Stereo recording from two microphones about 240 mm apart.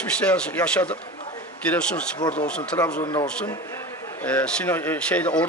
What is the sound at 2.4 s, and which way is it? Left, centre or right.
Speech, centre.